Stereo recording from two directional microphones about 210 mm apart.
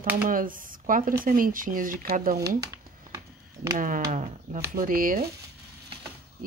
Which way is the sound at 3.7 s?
40° right (ahead or behind).